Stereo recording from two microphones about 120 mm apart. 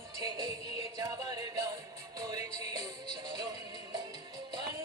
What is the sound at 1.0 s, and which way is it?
Music, 30° right (ahead or behind).